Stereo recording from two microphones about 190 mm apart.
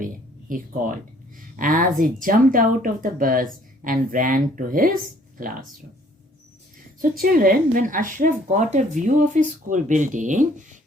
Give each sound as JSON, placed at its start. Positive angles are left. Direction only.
{"t": 0.0, "sound": "a sound", "side_deg": -45}
{"t": 1.5, "sound": "speech", "side_deg": -45}
{"t": 7.0, "sound": "a woman's voice", "side_deg": -50}